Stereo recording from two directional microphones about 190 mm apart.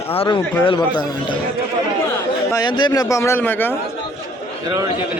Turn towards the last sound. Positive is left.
turn(degrees=10)  # may be behind; listen again after turning